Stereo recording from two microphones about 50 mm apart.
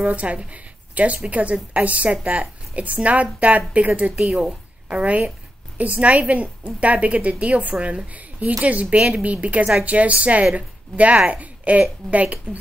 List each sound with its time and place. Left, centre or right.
0.0 s a woman's voice: right